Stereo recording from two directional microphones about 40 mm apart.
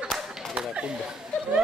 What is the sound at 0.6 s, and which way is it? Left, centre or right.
Chatter, right.